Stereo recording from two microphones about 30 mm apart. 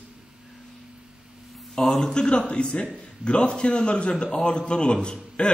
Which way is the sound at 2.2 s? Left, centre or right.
Left.